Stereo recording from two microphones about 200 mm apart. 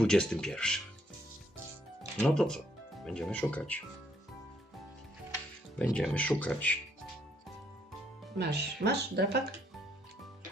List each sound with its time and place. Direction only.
0.0 s speech: 5° left (ahead or behind)
2.2 s speech: centre (ahead or behind)
5.8 s speech: 5° left (ahead or behind)
8.4 s speech: 55° right (ahead or behind)